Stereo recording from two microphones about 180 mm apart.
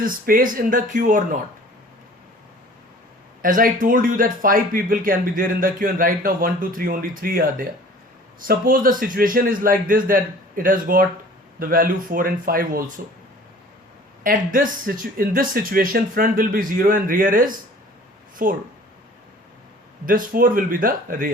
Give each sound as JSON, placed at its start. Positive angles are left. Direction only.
{"t": 0.0, "sound": "speech", "side_deg": -50}
{"t": 3.4, "sound": "speech", "side_deg": -50}
{"t": 14.3, "sound": "speech", "side_deg": -50}
{"t": 20.1, "sound": "speech", "side_deg": -50}